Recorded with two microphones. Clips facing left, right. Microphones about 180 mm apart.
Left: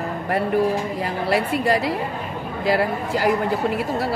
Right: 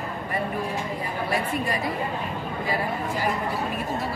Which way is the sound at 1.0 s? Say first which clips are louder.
Left 4 dB; 80° left.